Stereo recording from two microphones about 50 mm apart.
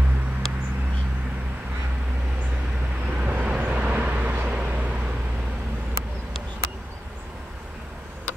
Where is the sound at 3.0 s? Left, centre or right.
Right.